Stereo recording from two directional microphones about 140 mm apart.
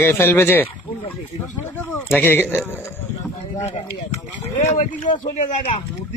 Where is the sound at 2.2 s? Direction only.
15° left (ahead or behind).